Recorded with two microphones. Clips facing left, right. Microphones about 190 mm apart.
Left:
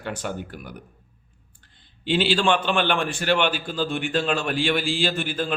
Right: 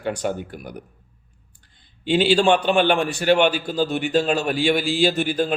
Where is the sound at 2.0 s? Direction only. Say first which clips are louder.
Right 4 dB; 45° right (ahead or behind).